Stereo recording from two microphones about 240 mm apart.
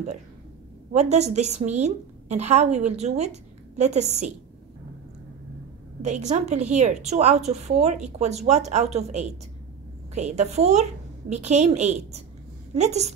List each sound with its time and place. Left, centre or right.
0.9 s a woman's voice: right
6.0 s a woman's voice: right